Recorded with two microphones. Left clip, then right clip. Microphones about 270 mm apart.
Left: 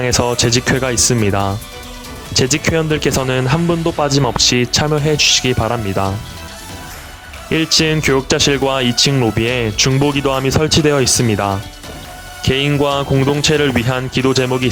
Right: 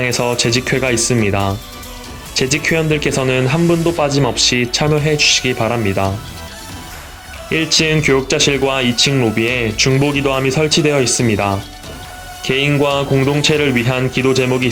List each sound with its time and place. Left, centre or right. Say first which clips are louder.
0.0 s speech: left 1 dB; left
7.5 s speech: even; left